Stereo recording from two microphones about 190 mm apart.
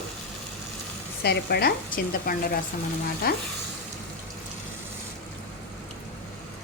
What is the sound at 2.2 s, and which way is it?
Speech, 50° left (ahead or behind).